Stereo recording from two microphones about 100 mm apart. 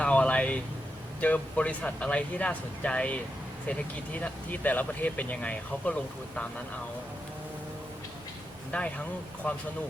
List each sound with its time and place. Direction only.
0.0 s a sound: 10° left (ahead or behind)
1.2 s speech: 15° left (ahead or behind)
8.7 s speech: 15° left (ahead or behind)